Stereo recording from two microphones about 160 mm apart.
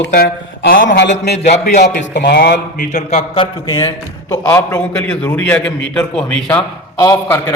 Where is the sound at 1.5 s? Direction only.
50° left (ahead or behind).